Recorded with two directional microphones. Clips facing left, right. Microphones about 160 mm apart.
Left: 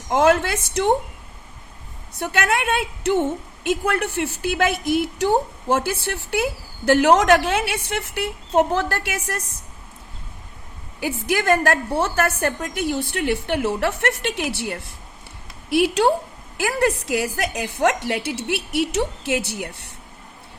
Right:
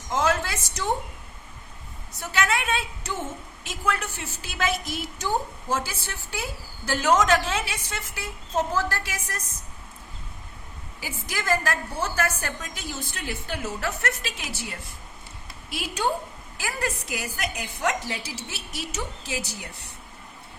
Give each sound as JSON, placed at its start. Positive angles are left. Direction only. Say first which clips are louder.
{"t": 0.1, "sound": "a woman's voice", "louder": "left 8 dB", "side_deg": 60}
{"t": 2.1, "sound": "a woman's voice", "louder": "left 4 dB", "side_deg": 55}
{"t": 11.0, "sound": "a woman's voice", "louder": "left 11 dB", "side_deg": 60}